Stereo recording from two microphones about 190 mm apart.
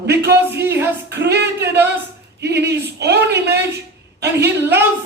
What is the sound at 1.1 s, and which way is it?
A woman's voice, 60° right (ahead or behind).